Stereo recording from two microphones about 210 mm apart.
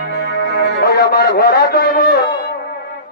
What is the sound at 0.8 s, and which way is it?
A man's voice, 50° left (ahead or behind).